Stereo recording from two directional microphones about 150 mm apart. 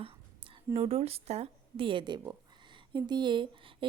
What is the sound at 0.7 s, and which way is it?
Speech, 40° right (ahead or behind).